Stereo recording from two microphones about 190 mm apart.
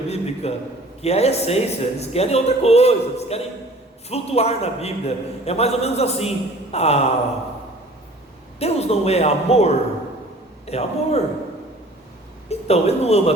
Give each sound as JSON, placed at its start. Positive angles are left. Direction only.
{"t": 0.1, "sound": "a sound", "side_deg": 35}
{"t": 1.0, "sound": "a man's voice", "side_deg": 35}
{"t": 8.5, "sound": "a man's voice", "side_deg": 35}
{"t": 12.5, "sound": "a man's voice", "side_deg": 35}